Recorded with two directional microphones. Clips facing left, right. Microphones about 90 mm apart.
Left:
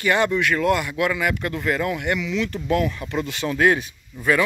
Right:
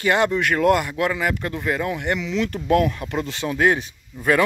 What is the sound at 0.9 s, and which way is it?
Speech, 30° right (ahead or behind).